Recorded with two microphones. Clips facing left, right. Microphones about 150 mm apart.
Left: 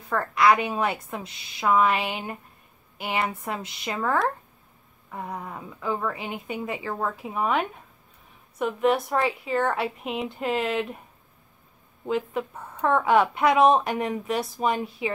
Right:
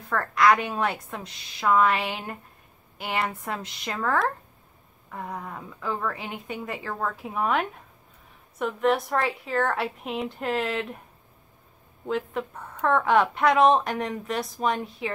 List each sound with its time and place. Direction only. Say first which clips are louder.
0.0 s a woman's voice: even; 5° left (ahead or behind)
12.1 s a woman's voice: left 2 dB; 5° left (ahead or behind)